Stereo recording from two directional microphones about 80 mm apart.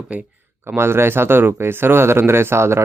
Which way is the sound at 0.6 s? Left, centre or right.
Right.